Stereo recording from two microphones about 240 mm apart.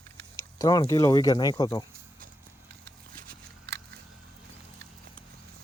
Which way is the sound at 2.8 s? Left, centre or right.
Right.